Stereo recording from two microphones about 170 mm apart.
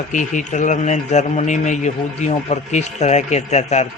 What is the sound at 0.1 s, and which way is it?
A man's voice, 45° left (ahead or behind).